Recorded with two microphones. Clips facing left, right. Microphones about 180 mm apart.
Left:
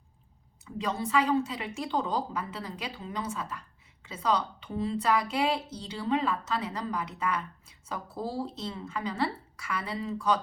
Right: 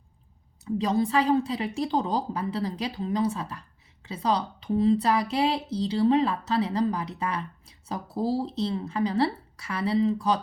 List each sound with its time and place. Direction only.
0.6 s a woman's voice: 35° right (ahead or behind)